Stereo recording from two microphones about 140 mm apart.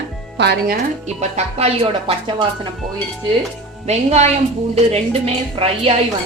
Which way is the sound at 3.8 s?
50° right (ahead or behind).